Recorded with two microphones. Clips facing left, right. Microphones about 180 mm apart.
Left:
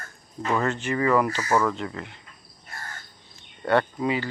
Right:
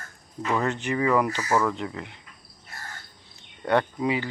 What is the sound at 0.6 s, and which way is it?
Speech, 15° right (ahead or behind).